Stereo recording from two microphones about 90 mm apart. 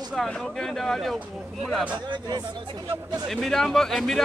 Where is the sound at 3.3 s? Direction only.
5° left (ahead or behind).